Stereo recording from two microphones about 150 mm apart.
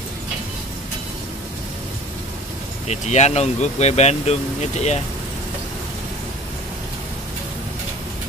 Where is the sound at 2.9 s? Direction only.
50° left (ahead or behind).